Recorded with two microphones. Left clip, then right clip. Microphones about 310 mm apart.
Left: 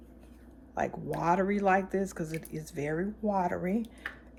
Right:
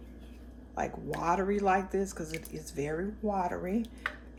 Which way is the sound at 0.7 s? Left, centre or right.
Left.